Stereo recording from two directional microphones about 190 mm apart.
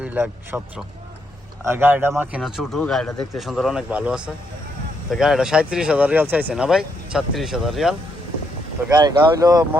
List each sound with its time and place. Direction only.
0.0 s a man's voice: 10° right (ahead or behind)
1.6 s speech: 10° right (ahead or behind)
2.4 s speech: centre (ahead or behind)
8.9 s speech: 20° right (ahead or behind)